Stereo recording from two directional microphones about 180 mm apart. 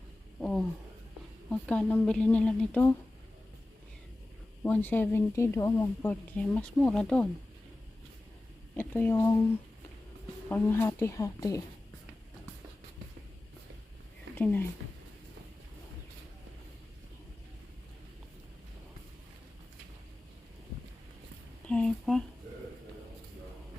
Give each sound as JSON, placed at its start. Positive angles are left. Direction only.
{"t": 0.3, "sound": "a sound", "side_deg": 5}
{"t": 1.5, "sound": "speech", "side_deg": 5}
{"t": 4.6, "sound": "speech", "side_deg": 10}
{"t": 8.7, "sound": "speech", "side_deg": 10}
{"t": 10.5, "sound": "speech", "side_deg": 15}
{"t": 14.3, "sound": "speech", "side_deg": 10}
{"t": 21.7, "sound": "speech", "side_deg": 5}